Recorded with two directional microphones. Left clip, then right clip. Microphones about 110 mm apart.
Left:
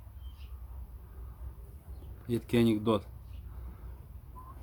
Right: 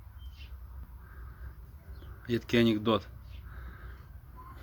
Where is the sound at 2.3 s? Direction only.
15° left (ahead or behind).